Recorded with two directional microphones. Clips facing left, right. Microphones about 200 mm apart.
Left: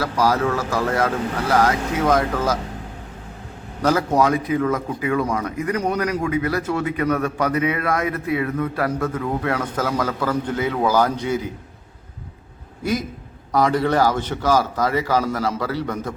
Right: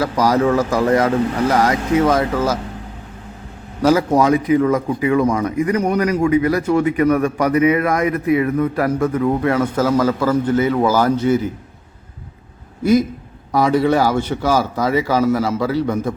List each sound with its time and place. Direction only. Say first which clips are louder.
0.0 s speech: right 4 dB; 15° right (ahead or behind)
3.8 s speech: right 4 dB; 10° right (ahead or behind)
13.5 s speech: right 4 dB; 10° right (ahead or behind)